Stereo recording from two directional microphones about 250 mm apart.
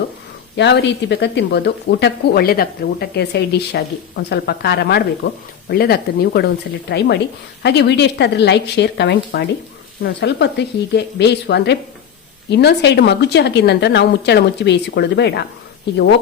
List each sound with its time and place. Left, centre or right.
0.5 s a woman's voice: left